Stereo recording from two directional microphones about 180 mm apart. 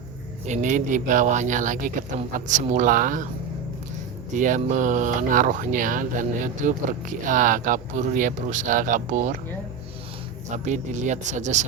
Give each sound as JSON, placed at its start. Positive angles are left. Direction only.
{"t": 0.4, "sound": "speech", "side_deg": -40}
{"t": 4.3, "sound": "speech", "side_deg": -45}
{"t": 10.5, "sound": "speech", "side_deg": -40}